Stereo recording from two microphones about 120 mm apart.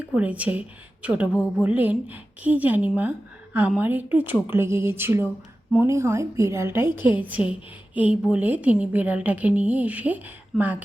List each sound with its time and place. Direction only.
0.0 s a woman's voice: 10° right (ahead or behind)